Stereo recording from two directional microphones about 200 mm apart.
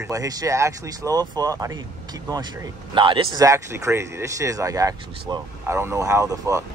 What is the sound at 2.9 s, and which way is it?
Speech, 25° right (ahead or behind).